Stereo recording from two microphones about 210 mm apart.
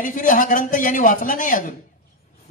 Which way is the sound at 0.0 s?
40° left (ahead or behind).